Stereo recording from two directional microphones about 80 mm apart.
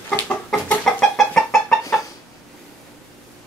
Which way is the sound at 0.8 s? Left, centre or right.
Centre.